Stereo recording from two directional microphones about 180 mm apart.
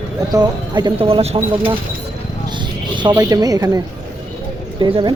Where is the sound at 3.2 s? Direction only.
20° right (ahead or behind).